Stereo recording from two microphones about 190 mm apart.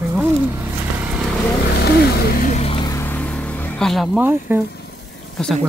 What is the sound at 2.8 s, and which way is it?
Vehicle, 15° left (ahead or behind).